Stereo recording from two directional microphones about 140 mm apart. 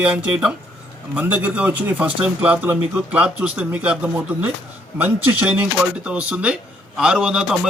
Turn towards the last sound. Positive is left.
turn(degrees=-5)  # may be behind; listen again after turning